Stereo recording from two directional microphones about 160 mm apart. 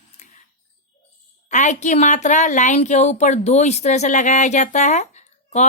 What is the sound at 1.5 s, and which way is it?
A woman's voice, 50° left (ahead or behind).